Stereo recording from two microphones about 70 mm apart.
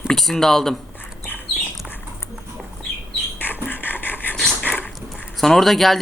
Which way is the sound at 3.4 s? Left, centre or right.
Left.